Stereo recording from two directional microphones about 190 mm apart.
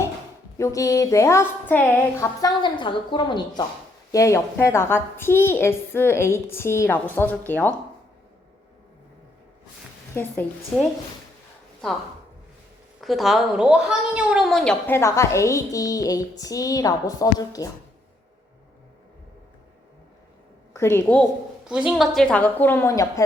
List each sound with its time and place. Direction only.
0.6 s a woman's voice: 15° left (ahead or behind)
13.0 s a woman's voice: centre (ahead or behind); by 17.7 s 20° left (ahead or behind)
20.7 s a woman's voice: 10° left (ahead or behind)
21.7 s a woman's voice: 5° right (ahead or behind); by 23.2 s 15° left (ahead or behind)